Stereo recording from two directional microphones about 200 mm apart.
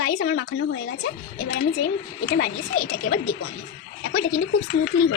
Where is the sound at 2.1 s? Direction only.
45° left (ahead or behind).